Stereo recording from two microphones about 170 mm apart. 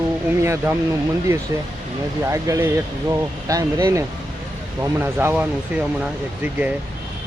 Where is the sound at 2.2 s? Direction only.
15° right (ahead or behind).